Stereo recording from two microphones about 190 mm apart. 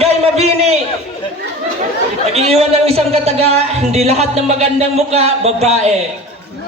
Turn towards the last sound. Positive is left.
turn(degrees=-35)  # may be behind; listen again after turning